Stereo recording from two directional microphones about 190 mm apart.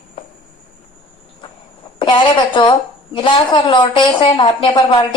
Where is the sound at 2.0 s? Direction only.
25° left (ahead or behind).